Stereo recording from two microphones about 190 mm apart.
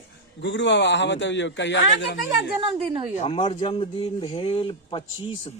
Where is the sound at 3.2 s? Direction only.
30° left (ahead or behind).